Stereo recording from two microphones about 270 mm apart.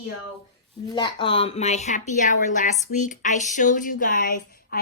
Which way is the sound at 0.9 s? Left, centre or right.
Centre.